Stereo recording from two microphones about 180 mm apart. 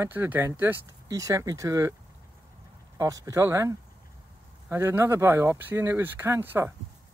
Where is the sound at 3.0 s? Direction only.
20° right (ahead or behind).